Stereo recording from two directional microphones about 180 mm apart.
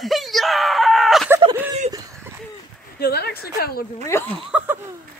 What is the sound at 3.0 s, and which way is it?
Speech, 60° left (ahead or behind).